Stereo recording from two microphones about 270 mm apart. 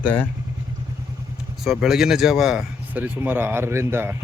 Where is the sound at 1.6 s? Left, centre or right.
Centre.